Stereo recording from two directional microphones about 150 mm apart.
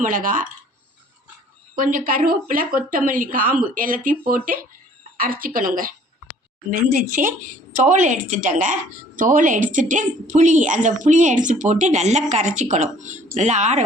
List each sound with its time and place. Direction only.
0.0 s a woman's voice: 65° right (ahead or behind)
1.7 s a woman's voice: 65° right (ahead or behind)